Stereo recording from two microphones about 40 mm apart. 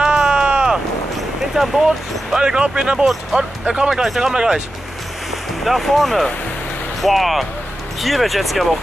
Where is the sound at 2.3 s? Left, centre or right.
Right.